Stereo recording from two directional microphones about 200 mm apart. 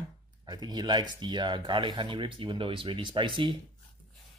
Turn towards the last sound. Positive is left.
turn(degrees=-25)  # may be behind; listen again after turning